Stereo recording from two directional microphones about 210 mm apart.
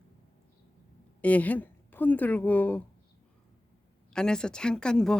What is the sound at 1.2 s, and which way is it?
Speech, 5° left (ahead or behind).